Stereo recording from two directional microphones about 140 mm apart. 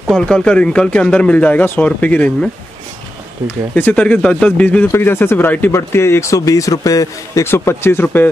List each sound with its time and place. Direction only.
0.1 s speech: 5° left (ahead or behind)
3.7 s speech: 10° left (ahead or behind)